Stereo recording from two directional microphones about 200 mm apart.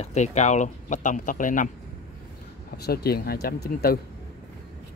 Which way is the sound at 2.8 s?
50° left (ahead or behind).